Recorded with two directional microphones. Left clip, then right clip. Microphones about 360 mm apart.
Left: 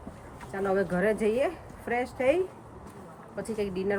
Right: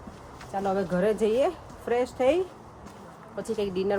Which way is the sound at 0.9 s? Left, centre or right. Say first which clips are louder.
Right 2 dB; centre.